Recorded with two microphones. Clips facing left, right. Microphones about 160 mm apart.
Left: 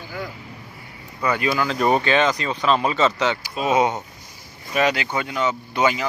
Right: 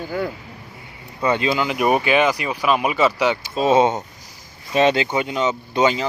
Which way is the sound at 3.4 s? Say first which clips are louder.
Right 4 dB; 30° right (ahead or behind).